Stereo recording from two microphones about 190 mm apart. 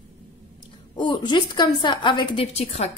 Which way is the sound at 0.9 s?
25° left (ahead or behind).